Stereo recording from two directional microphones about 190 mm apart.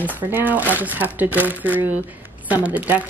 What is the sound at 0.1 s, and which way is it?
A woman's voice, 10° right (ahead or behind).